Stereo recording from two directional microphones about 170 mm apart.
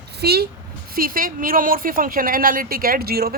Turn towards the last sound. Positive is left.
turn(degrees=-65)  # may be behind; listen again after turning